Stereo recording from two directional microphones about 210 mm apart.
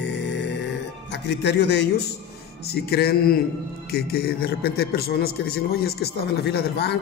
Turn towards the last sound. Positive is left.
turn(degrees=50)  # may be behind; listen again after turning